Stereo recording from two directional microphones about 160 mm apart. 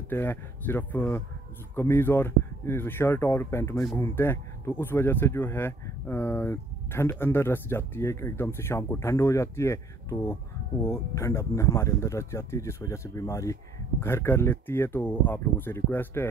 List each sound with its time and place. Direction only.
0.1 s speech: 15° left (ahead or behind)